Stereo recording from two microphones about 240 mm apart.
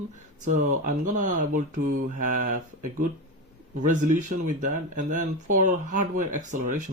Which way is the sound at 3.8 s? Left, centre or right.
Right.